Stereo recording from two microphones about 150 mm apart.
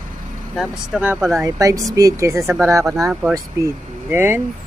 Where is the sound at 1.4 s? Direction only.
20° right (ahead or behind).